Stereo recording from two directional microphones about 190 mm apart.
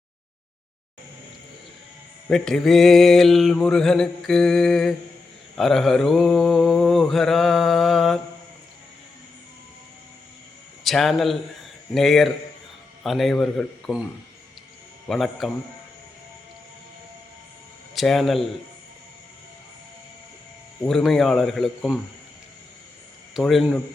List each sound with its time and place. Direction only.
2.3 s mantra: centre (ahead or behind)
10.8 s mantra: centre (ahead or behind)
13.0 s speech: centre (ahead or behind)
15.0 s mantra: centre (ahead or behind)
17.9 s speech: centre (ahead or behind)
20.8 s mantra: centre (ahead or behind)
23.3 s mantra: centre (ahead or behind)